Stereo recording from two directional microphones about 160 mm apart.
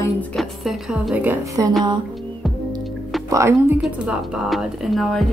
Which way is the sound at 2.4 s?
Centre (ahead or behind).